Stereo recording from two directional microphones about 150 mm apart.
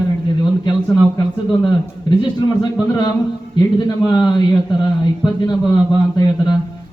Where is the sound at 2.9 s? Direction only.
25° left (ahead or behind).